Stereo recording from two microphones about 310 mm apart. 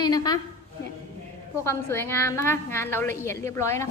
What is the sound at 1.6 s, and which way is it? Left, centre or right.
A woman's voice, centre.